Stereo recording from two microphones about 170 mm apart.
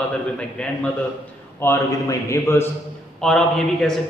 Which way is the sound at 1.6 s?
15° left (ahead or behind).